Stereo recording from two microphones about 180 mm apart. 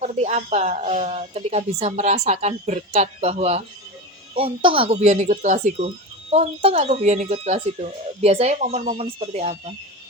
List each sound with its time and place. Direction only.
0.0 s speech: 40° right (ahead or behind)